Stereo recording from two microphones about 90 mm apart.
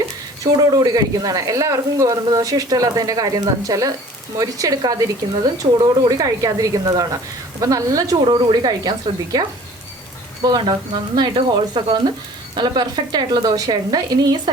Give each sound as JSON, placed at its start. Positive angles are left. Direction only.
{"t": 0.5, "sound": "speech", "side_deg": -45}
{"t": 5.6, "sound": "speech", "side_deg": -70}
{"t": 6.1, "sound": "a woman's voice", "side_deg": -40}
{"t": 10.4, "sound": "a woman's voice", "side_deg": -55}